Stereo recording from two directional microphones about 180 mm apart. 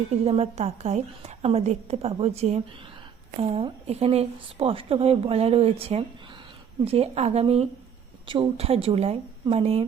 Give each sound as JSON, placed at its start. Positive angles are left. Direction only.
{"t": 0.3, "sound": "speech", "side_deg": -35}